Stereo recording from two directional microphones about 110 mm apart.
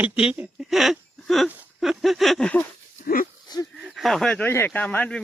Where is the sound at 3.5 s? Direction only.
40° left (ahead or behind).